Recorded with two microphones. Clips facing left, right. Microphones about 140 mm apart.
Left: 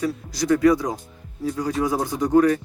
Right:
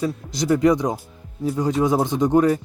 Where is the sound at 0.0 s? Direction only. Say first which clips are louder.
Right 1 dB; 25° right (ahead or behind).